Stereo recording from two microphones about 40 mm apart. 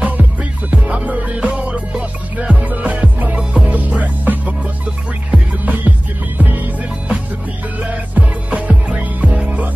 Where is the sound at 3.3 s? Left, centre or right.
Right.